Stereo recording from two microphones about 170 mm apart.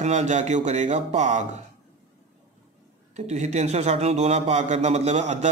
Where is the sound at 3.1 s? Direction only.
40° right (ahead or behind).